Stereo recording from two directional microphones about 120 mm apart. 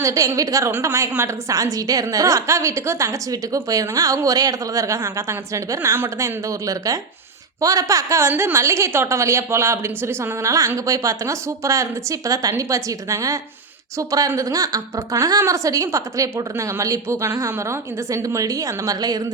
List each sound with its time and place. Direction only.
0.0 s a woman's voice: 25° right (ahead or behind)